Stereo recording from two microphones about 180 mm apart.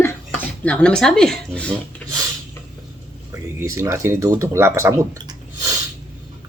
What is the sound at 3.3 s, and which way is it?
Speech, 15° right (ahead or behind).